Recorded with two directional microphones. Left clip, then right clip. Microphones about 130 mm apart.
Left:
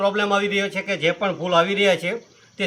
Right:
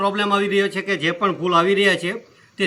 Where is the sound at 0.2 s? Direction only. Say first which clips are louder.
Right 2 dB; 20° left (ahead or behind).